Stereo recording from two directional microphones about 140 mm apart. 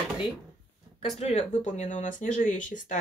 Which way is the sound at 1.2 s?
50° left (ahead or behind).